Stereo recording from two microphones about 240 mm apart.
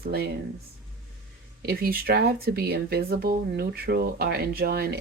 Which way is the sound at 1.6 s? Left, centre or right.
Right.